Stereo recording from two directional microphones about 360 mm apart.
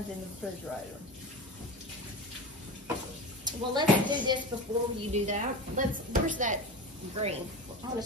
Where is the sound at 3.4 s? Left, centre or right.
Centre.